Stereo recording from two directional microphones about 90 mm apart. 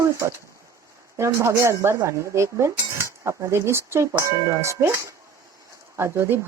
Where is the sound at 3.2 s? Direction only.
30° right (ahead or behind).